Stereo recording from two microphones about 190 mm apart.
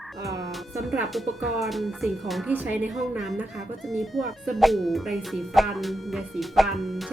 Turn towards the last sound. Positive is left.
turn(degrees=0)  # may be behind; listen again after turning